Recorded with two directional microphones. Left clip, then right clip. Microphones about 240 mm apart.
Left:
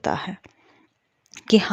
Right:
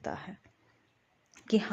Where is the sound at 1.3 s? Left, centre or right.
Left.